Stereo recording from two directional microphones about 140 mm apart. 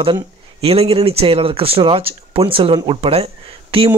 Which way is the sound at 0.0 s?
45° right (ahead or behind).